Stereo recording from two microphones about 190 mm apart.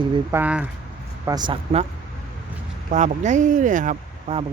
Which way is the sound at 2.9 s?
40° right (ahead or behind).